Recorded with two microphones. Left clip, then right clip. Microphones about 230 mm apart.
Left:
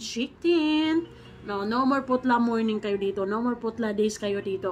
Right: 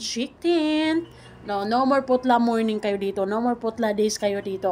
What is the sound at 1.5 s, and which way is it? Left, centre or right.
A woman's voice, centre.